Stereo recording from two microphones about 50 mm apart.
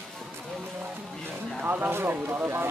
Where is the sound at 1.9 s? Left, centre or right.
Right.